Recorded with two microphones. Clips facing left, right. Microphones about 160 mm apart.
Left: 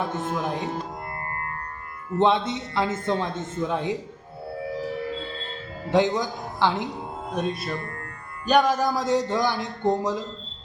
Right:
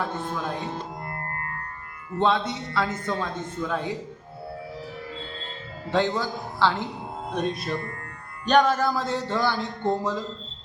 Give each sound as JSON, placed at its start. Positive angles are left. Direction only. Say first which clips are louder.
{"t": 0.0, "sound": "speech", "louder": "left 2 dB", "side_deg": 15}
{"t": 2.1, "sound": "speech", "louder": "left 2 dB", "side_deg": 20}
{"t": 5.9, "sound": "speech", "louder": "left 3 dB", "side_deg": 15}
{"t": 7.3, "sound": "speech", "louder": "even", "side_deg": 5}